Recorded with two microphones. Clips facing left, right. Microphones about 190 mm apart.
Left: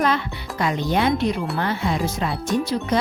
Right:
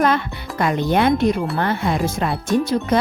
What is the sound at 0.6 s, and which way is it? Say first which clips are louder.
Speech: right 3 dB; 55° right (ahead or behind).